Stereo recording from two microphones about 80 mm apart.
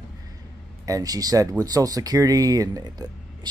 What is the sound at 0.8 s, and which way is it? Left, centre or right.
Speech, right.